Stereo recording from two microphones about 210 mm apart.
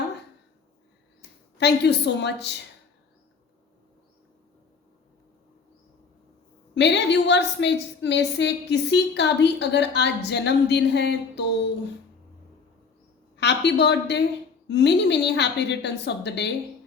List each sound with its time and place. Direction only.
1.5 s a woman's voice: 55° left (ahead or behind)
6.7 s a woman's voice: 55° left (ahead or behind)
13.3 s a woman's voice: 55° left (ahead or behind)